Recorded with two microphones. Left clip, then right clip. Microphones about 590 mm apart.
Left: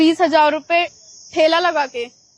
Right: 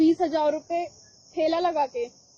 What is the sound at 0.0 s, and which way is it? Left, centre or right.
A woman's voice, left.